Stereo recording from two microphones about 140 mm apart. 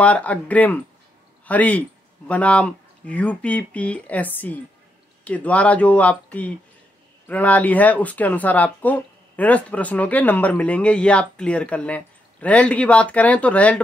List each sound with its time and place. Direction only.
0.0 s speech: 10° left (ahead or behind)